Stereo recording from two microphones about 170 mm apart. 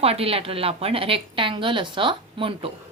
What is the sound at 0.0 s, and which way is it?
A woman's voice, 35° right (ahead or behind).